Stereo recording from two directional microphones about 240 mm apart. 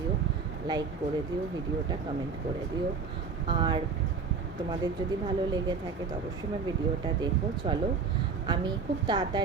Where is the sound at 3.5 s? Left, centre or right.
Centre.